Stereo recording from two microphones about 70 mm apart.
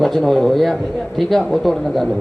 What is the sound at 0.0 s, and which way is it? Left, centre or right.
A man's voice, centre.